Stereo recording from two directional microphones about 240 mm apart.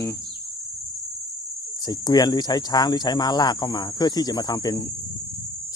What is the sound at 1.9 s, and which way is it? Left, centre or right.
Speech, centre.